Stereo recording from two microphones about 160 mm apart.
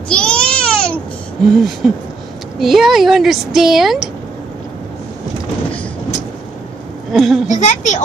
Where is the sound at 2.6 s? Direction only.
Centre (ahead or behind).